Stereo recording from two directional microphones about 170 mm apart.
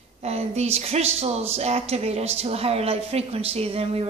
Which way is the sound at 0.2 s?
40° right (ahead or behind).